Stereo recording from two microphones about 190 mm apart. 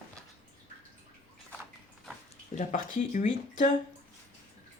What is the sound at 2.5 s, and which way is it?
Speech, 40° left (ahead or behind).